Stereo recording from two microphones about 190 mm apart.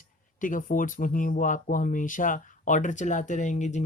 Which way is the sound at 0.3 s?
45° left (ahead or behind).